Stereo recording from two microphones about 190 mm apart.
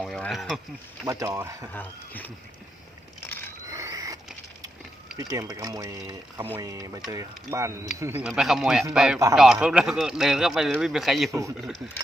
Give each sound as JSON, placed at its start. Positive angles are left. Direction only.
{"t": 0.0, "sound": "a sound", "side_deg": 0}
{"t": 1.0, "sound": "speech", "side_deg": -20}
{"t": 1.7, "sound": "speech", "side_deg": 10}
{"t": 3.7, "sound": "a sound", "side_deg": -15}
{"t": 5.1, "sound": "speech", "side_deg": -20}
{"t": 8.3, "sound": "a man's voice", "side_deg": 0}
{"t": 11.3, "sound": "speech", "side_deg": -15}
{"t": 11.5, "sound": "a man's voice", "side_deg": 0}